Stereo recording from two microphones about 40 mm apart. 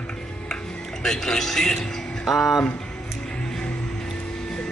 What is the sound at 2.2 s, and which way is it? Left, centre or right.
Speech, centre.